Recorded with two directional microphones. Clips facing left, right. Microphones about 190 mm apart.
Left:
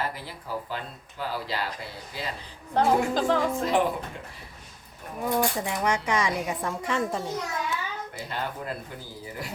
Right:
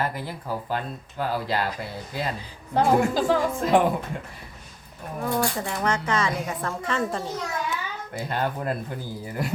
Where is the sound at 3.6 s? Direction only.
50° right (ahead or behind).